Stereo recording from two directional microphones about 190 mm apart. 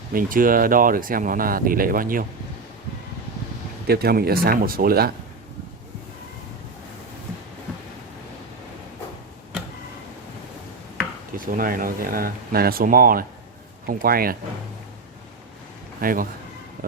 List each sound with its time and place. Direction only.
0.1 s speech: 45° right (ahead or behind)
3.8 s speech: 55° right (ahead or behind)
11.3 s speech: 50° right (ahead or behind)
16.0 s speech: 50° right (ahead or behind)